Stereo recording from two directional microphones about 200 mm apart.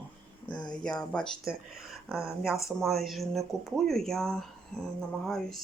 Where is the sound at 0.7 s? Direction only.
5° left (ahead or behind).